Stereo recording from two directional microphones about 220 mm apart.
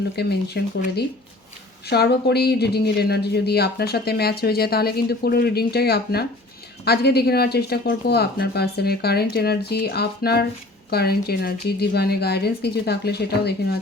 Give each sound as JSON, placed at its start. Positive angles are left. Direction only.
{"t": 0.2, "sound": "speech", "side_deg": 45}